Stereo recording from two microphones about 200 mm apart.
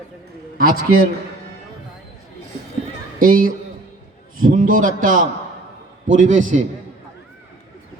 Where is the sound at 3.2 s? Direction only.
45° right (ahead or behind).